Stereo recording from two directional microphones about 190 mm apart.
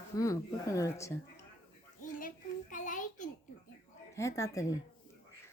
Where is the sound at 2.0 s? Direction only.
45° left (ahead or behind).